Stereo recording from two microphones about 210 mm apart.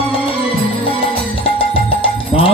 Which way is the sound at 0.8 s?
25° left (ahead or behind).